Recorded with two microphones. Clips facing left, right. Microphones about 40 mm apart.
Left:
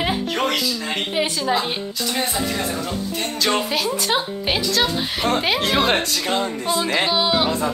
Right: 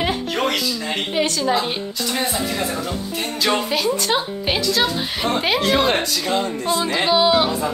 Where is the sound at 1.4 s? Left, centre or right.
Centre.